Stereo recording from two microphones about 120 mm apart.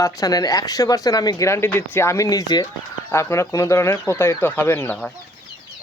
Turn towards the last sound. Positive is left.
turn(degrees=15)  # may be behind; listen again after turning